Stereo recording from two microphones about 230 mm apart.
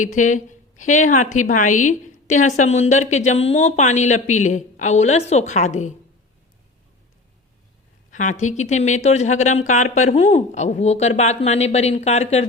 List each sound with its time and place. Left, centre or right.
0.0 s a woman's voice: left
8.1 s a woman's voice: left